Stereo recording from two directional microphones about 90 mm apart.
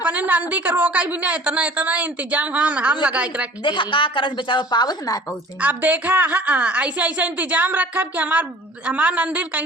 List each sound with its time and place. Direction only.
0.0 s a man's voice: 15° right (ahead or behind)
3.6 s a woman's voice: 65° left (ahead or behind); by 5.2 s 45° left (ahead or behind)
5.5 s a man's voice: 20° right (ahead or behind)